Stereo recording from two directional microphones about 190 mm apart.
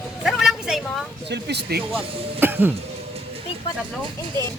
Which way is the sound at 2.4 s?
10° right (ahead or behind).